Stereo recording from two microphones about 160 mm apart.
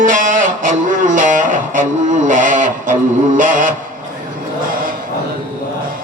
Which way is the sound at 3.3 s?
55° right (ahead or behind).